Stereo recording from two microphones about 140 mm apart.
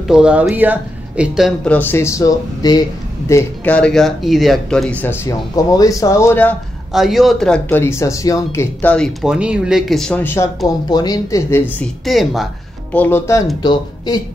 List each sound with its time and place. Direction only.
0.1 s speech: 10° right (ahead or behind)
1.6 s speech: 10° left (ahead or behind)
3.7 s speech: 5° left (ahead or behind)
6.9 s speech: centre (ahead or behind); by 8.9 s 20° left (ahead or behind)
8.9 s speech: centre (ahead or behind); by 10.5 s 15° left (ahead or behind)
10.9 s speech: 30° left (ahead or behind)
11.8 s speech: centre (ahead or behind)
12.9 s speech: 15° left (ahead or behind)
13.6 s speech: 30° left (ahead or behind)